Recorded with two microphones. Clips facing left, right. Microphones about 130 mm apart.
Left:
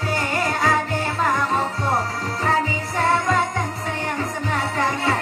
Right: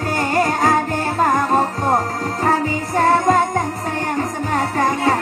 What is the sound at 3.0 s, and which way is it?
Music, 45° right (ahead or behind).